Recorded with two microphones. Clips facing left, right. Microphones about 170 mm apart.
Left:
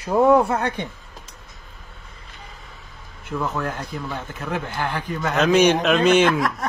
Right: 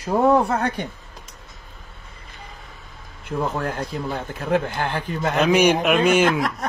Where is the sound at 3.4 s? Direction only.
30° right (ahead or behind).